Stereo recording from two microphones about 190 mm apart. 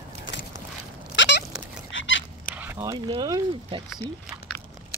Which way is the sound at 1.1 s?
70° left (ahead or behind).